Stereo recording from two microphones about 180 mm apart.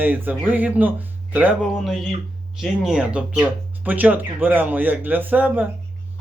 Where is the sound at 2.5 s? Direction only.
5° right (ahead or behind).